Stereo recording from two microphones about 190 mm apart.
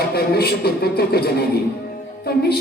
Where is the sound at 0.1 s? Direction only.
55° left (ahead or behind).